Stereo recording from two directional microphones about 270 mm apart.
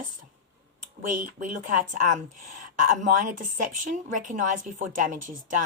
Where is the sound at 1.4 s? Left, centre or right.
Right.